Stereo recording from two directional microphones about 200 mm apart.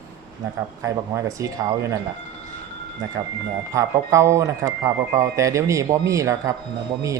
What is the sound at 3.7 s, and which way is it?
Speech, 15° right (ahead or behind).